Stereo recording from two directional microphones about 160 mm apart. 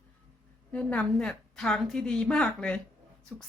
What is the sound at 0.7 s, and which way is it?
Speech, 10° left (ahead or behind).